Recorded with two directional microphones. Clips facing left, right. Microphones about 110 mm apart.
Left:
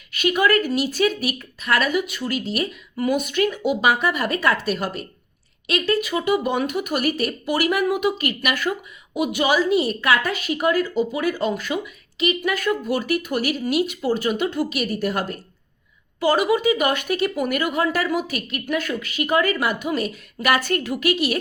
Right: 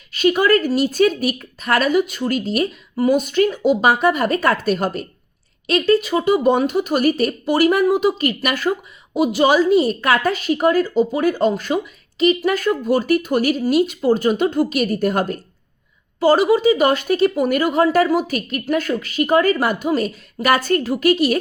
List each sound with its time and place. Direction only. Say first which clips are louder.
0.1 s speech: right 4 dB; 35° right (ahead or behind)
16.2 s speech: right 5 dB; 35° right (ahead or behind)